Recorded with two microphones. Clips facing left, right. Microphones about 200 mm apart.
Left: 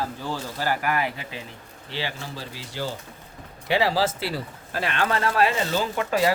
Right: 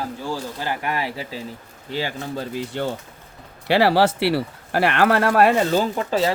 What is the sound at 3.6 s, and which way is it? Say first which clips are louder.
Speech: right 6 dB; 70° right (ahead or behind).